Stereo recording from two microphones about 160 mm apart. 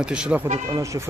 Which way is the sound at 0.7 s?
20° right (ahead or behind).